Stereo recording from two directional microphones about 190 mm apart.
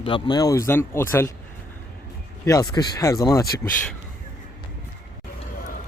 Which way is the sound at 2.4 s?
15° left (ahead or behind).